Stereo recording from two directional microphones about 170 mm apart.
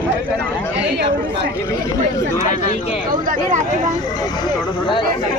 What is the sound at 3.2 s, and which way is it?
Speech, 55° right (ahead or behind).